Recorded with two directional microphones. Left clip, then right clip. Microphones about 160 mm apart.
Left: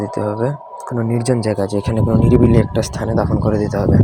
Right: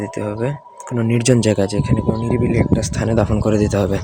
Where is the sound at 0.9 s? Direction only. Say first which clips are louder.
Right 1 dB; 25° right (ahead or behind).